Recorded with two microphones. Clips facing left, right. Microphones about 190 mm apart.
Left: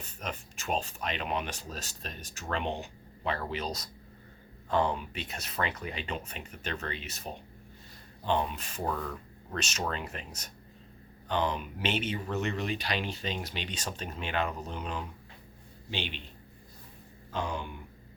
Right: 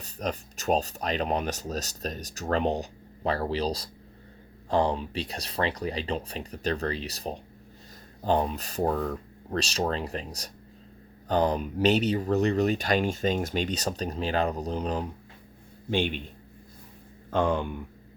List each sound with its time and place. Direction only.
0.0 s speech: 35° right (ahead or behind)
15.9 s speech: 50° right (ahead or behind)
17.3 s speech: 55° right (ahead or behind)